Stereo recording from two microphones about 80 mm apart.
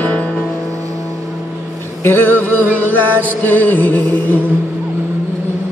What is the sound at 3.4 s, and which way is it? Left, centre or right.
Music, left.